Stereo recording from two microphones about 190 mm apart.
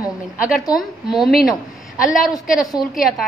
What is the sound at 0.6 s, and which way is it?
Speech, 20° left (ahead or behind).